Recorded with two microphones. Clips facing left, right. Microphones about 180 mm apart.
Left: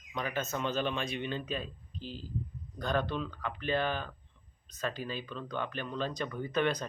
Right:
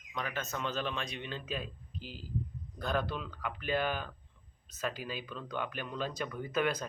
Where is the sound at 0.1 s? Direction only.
Centre (ahead or behind).